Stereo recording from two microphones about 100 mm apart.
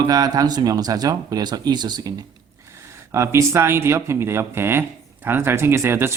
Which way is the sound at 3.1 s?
30° right (ahead or behind).